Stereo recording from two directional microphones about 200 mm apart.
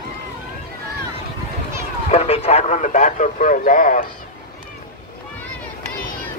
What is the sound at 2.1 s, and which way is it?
Speech, 30° left (ahead or behind).